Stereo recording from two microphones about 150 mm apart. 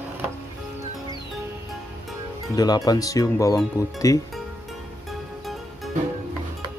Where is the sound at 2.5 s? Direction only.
25° left (ahead or behind).